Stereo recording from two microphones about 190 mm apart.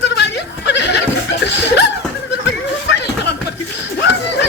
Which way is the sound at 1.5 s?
65° left (ahead or behind).